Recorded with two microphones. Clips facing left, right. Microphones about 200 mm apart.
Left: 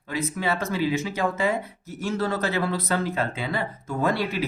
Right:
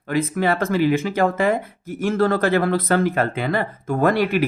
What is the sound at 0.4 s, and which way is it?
Speech, 55° right (ahead or behind).